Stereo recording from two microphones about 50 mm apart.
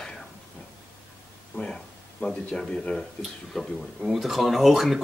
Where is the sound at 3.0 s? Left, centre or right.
Centre.